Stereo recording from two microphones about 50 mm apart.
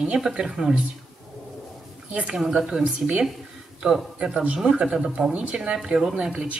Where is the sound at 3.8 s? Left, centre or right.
Centre.